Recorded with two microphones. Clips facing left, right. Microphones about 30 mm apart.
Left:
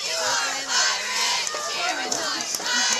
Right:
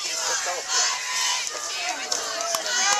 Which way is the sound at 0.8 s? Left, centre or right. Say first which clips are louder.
Left 3 dB; left.